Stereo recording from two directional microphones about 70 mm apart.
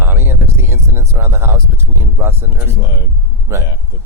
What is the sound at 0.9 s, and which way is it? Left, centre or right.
Speech, right.